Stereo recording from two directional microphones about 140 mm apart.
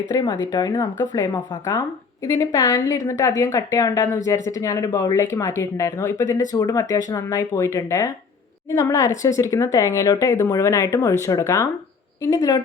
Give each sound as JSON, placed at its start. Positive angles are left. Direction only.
{"t": 0.1, "sound": "speech", "side_deg": 25}